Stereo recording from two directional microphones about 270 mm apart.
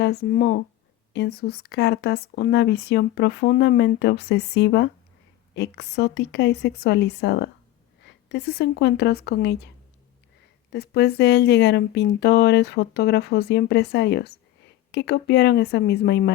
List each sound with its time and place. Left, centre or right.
0.0 s speech: left
10.7 s speech: left